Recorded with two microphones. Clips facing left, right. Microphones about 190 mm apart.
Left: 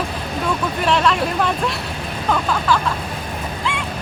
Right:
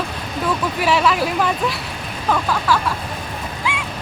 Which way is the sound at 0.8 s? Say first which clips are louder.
Even; 5° right (ahead or behind).